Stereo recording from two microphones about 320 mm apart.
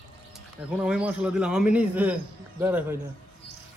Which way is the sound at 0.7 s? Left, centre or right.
Centre.